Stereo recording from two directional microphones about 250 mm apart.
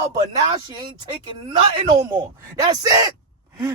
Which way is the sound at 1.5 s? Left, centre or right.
Centre.